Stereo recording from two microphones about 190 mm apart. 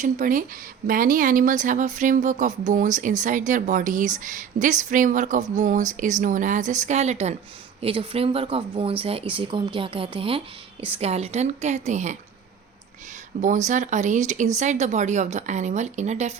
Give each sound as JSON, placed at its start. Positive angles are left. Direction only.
{"t": 0.0, "sound": "speech", "side_deg": -45}
{"t": 13.4, "sound": "speech", "side_deg": -40}